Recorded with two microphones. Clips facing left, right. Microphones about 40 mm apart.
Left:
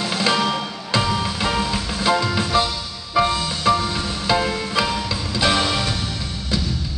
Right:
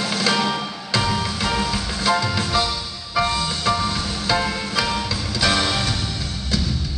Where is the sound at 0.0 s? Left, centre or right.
Centre.